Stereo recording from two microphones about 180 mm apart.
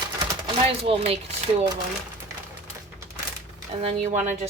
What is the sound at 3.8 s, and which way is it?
Speech, 35° right (ahead or behind).